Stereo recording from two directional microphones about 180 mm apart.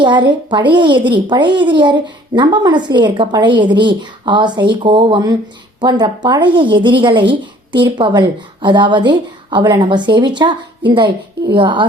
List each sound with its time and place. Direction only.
0.0 s speech: 25° right (ahead or behind)